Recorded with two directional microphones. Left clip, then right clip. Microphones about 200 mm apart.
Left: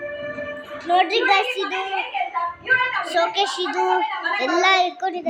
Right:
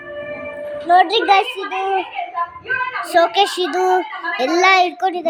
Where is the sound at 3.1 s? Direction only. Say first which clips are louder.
Right 9 dB; 20° right (ahead or behind).